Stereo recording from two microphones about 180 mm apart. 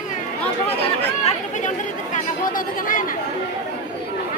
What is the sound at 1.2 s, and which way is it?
Chatter, 45° left (ahead or behind).